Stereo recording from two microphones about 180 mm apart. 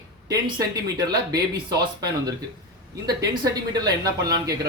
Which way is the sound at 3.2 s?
20° right (ahead or behind).